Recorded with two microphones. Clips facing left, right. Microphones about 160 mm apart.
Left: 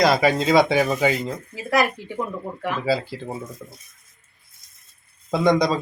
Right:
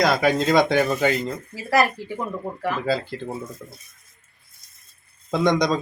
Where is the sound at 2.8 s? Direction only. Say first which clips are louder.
Left 1 dB; 5° left (ahead or behind).